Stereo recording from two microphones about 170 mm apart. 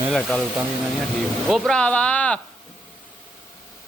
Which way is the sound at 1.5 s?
Centre (ahead or behind).